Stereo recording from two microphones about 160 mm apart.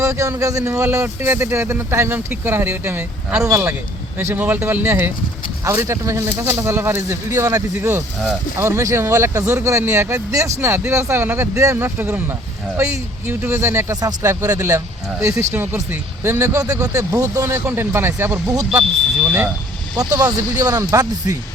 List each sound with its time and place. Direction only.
0.0 s speech: 20° right (ahead or behind)
20.0 s speech: 25° right (ahead or behind)